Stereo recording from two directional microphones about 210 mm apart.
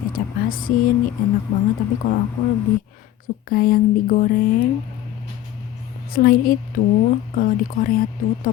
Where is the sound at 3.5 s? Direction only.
40° left (ahead or behind).